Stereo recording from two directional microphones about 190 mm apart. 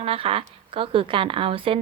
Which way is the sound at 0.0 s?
30° right (ahead or behind).